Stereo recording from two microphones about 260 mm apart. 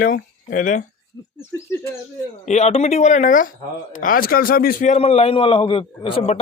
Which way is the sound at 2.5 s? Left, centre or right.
Left.